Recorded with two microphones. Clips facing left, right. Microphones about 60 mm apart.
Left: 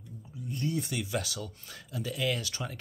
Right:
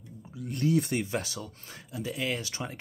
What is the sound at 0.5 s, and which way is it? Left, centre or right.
Speech, right.